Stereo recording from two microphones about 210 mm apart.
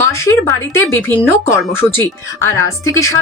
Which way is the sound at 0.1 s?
15° left (ahead or behind).